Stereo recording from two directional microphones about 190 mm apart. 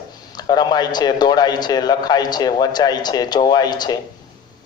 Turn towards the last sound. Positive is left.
turn(degrees=20)  # may be behind; listen again after turning